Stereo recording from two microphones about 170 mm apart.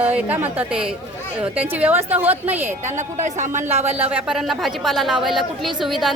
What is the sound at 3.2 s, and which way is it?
Speech, 45° right (ahead or behind).